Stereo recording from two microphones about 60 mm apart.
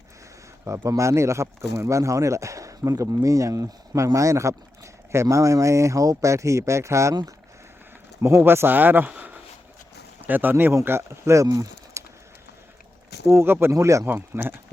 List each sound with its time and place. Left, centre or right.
0.9 s speech: right
8.2 s speech: right
12.0 s a sound: right
13.2 s speech: right
14.3 s speech: right